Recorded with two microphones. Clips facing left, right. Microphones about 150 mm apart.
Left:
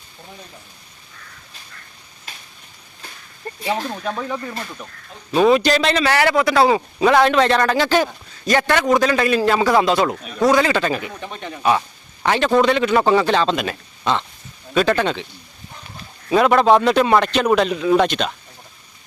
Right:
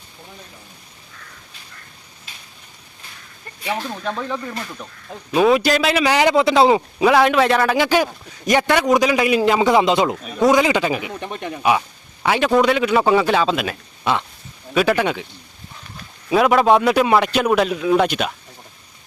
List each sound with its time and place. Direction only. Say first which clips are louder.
3.4 s speech: left 10 dB; 35° left (ahead or behind)
3.8 s a man's voice: left 1 dB; 10° left (ahead or behind); by 6.8 s 20° right (ahead or behind)
7.0 s a man's voice: left 1 dB; 5° right (ahead or behind)
16.3 s a man's voice: left 1 dB; 5° right (ahead or behind)